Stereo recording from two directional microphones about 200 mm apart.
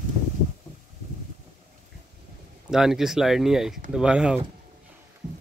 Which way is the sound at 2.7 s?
Centre (ahead or behind).